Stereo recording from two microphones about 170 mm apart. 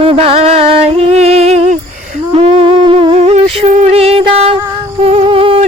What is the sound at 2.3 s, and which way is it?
Humming, 35° right (ahead or behind).